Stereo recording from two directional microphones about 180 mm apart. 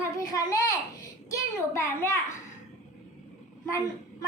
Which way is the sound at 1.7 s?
15° left (ahead or behind).